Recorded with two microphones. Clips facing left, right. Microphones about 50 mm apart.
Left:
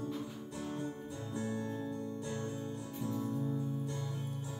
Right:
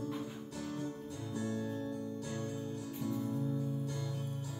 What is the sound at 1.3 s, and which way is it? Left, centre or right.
Music, centre.